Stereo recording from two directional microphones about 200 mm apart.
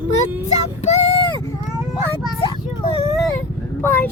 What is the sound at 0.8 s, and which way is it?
Speech, 35° left (ahead or behind).